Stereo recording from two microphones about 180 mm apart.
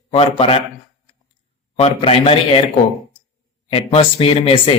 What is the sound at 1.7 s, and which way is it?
Speech, 30° left (ahead or behind).